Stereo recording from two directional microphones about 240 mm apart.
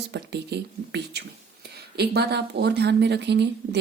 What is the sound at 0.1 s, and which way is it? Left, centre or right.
Speech, right.